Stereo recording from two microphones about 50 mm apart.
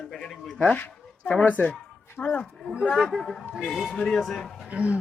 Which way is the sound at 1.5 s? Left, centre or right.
Left.